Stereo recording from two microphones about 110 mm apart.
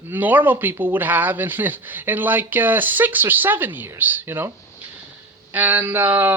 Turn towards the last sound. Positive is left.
turn(degrees=-20)  # may be behind; listen again after turning